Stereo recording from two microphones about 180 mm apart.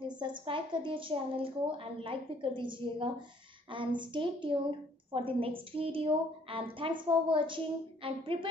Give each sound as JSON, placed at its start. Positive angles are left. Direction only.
{"t": 0.2, "sound": "a woman's voice", "side_deg": -25}